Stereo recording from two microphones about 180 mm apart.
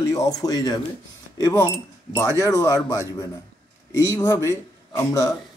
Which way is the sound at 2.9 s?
15° left (ahead or behind).